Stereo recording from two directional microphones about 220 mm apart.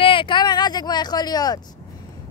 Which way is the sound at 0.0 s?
25° left (ahead or behind).